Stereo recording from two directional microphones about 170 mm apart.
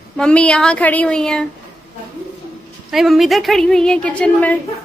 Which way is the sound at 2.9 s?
Centre (ahead or behind).